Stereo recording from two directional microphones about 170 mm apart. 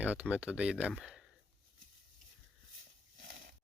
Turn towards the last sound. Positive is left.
turn(degrees=-60)  # may be behind; listen again after turning